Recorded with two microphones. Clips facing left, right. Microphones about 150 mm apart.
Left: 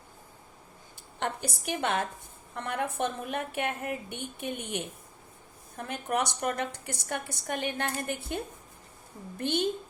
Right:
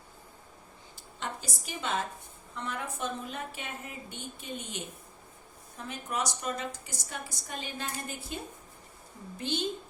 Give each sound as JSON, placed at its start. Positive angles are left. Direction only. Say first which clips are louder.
{"t": 1.2, "sound": "a woman's voice", "louder": "left 6 dB", "side_deg": 60}
{"t": 9.4, "sound": "a woman's voice", "louder": "left 4 dB", "side_deg": 55}